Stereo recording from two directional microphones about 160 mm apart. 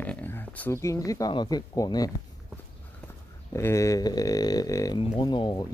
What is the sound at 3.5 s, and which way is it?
Speech, 20° left (ahead or behind).